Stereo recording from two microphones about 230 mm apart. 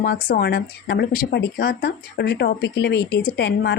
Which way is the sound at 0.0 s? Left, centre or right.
Left.